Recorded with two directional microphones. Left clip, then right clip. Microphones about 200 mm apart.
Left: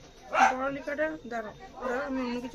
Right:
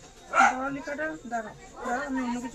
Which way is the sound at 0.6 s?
35° left (ahead or behind).